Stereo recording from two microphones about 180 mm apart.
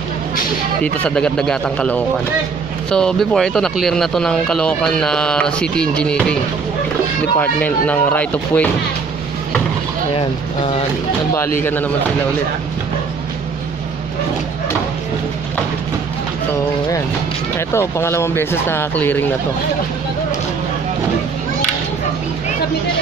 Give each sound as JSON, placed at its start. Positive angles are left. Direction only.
{"t": 0.9, "sound": "speech", "side_deg": 5}
{"t": 7.3, "sound": "speech", "side_deg": 10}
{"t": 10.1, "sound": "speech", "side_deg": 30}
{"t": 11.3, "sound": "speech", "side_deg": 15}
{"t": 17.6, "sound": "speech", "side_deg": 15}